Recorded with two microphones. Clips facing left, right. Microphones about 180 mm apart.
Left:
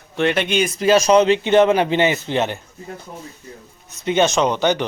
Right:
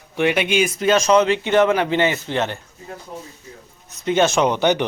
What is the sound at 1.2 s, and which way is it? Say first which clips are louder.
Speech: left 2 dB; 25° left (ahead or behind).